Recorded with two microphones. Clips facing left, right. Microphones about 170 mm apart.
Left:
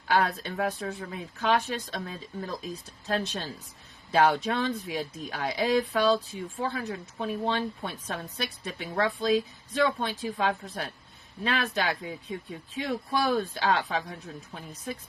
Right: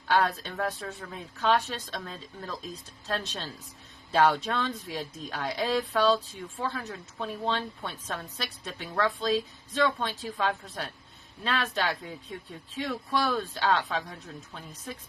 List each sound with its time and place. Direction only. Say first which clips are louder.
0.2 s a woman's voice: left 1 dB; 10° left (ahead or behind)